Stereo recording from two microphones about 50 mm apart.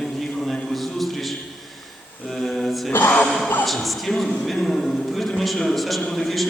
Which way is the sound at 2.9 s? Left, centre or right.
Left.